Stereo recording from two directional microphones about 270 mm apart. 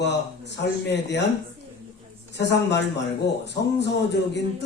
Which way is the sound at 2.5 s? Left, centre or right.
Left.